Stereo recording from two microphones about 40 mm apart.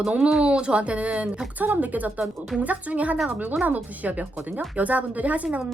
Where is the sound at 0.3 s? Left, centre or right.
Right.